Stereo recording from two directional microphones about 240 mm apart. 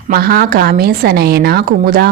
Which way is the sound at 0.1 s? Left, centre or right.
Right.